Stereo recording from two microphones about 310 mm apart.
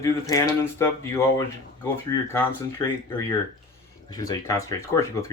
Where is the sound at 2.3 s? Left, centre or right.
Centre.